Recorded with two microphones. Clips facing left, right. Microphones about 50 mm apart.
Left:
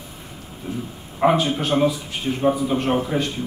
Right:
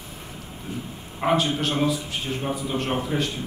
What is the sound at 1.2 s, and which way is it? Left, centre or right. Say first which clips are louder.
A man's voice: left 4 dB; centre.